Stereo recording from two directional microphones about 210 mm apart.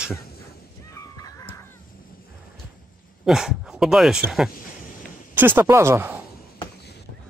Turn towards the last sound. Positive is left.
turn(degrees=-10)  # may be behind; listen again after turning